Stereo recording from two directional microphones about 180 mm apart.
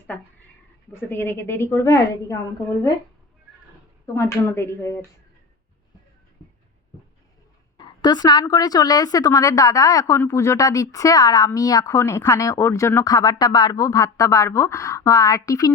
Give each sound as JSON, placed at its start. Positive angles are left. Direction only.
{"t": 0.9, "sound": "a woman's voice", "side_deg": 10}
{"t": 4.0, "sound": "a woman's voice", "side_deg": 15}
{"t": 6.4, "sound": "a sound", "side_deg": 25}
{"t": 7.8, "sound": "a woman's voice", "side_deg": 25}